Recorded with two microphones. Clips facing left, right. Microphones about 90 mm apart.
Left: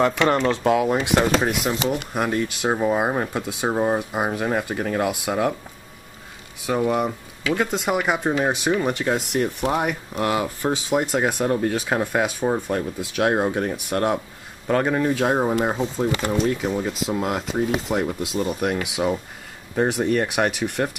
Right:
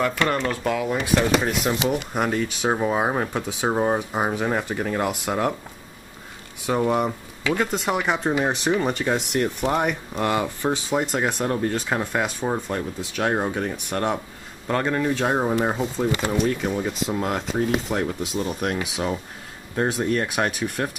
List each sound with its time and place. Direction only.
0.0 s speech: 20° left (ahead or behind)
1.6 s speech: centre (ahead or behind)
6.6 s speech: centre (ahead or behind)